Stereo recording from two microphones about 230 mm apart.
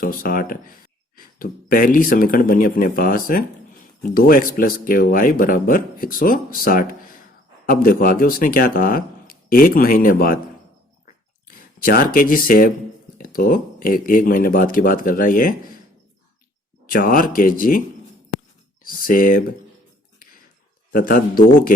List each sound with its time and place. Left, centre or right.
0.0 s speech: left
11.5 s speech: left
16.8 s speech: left
20.9 s speech: left